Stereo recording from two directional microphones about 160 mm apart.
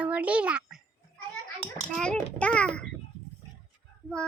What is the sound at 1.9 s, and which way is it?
Speech, 5° left (ahead or behind).